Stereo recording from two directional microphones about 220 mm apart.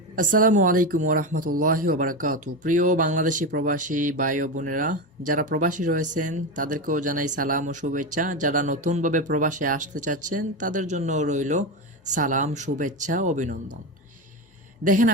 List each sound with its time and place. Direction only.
0.2 s speech: 35° right (ahead or behind)
14.8 s speech: 35° right (ahead or behind)